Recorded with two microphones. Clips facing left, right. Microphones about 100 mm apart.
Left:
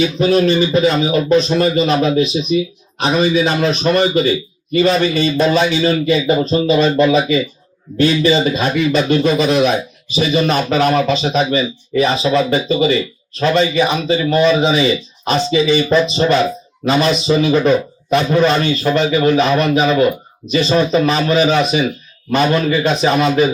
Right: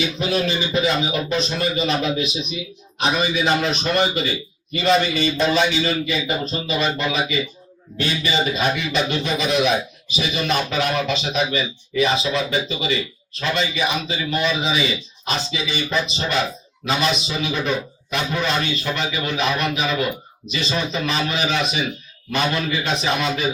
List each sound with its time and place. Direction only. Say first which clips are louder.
0.0 s a man's voice: left 9 dB; 40° left (ahead or behind)